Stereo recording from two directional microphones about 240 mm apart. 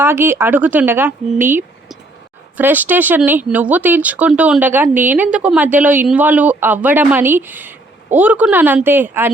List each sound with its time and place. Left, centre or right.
0.0 s speech: centre